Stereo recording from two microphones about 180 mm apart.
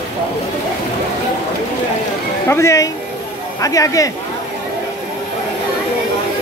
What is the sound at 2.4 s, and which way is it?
Speech, 15° left (ahead or behind).